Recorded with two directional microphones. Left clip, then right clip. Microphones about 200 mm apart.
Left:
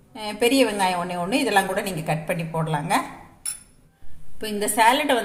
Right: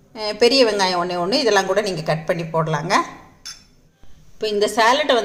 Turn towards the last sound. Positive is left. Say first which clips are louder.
# right 3 dB
turn(degrees=-20)  # may be behind; listen again after turning